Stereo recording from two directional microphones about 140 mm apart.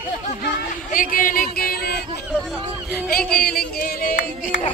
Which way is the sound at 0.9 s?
80° left.